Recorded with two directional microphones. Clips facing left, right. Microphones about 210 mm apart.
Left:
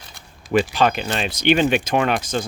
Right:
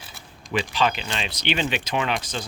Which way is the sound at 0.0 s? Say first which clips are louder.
Right 1 dB; 5° right (ahead or behind).